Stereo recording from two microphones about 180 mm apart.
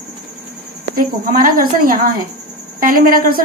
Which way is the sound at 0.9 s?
50° right (ahead or behind).